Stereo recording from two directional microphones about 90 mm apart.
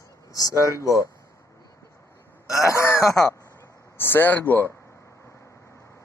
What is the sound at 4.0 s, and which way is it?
Speech, 25° left (ahead or behind).